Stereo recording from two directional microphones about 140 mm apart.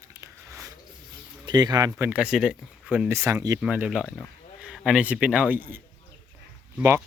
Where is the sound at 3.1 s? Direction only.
20° right (ahead or behind).